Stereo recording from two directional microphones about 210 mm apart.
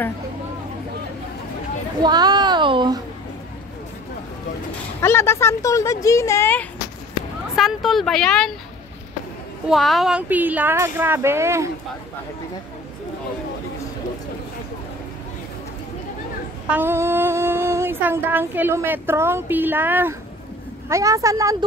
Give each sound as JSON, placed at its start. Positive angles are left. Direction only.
{"t": 2.0, "sound": "a sound", "side_deg": -20}
{"t": 5.0, "sound": "speech", "side_deg": 10}
{"t": 9.7, "sound": "child singing", "side_deg": 0}
{"t": 16.6, "sound": "child singing", "side_deg": -10}